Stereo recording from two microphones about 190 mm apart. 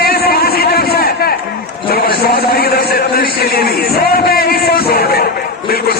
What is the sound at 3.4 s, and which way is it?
Music, 55° left (ahead or behind).